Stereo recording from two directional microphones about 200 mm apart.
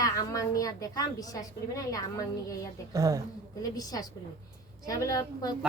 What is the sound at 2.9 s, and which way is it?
Speech, 15° right (ahead or behind).